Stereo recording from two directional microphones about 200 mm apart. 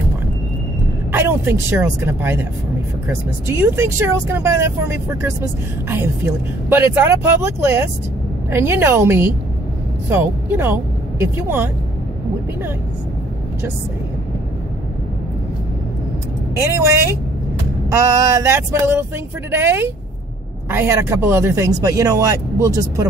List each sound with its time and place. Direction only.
1.1 s speech: 10° right (ahead or behind)
3.4 s speech: 10° right (ahead or behind)
16.5 s speech: 15° right (ahead or behind)